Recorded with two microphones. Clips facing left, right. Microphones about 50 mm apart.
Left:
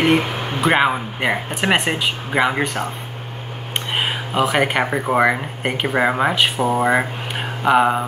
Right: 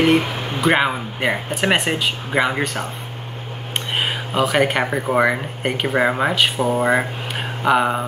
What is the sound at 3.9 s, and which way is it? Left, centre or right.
Speech, centre.